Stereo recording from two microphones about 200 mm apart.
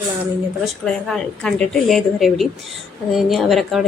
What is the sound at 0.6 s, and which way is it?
A woman's voice, centre (ahead or behind).